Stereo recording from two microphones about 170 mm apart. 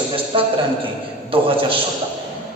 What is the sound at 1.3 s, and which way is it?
Speech, 30° right (ahead or behind).